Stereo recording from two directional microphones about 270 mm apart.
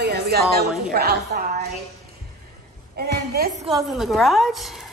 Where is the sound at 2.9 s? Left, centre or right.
Right.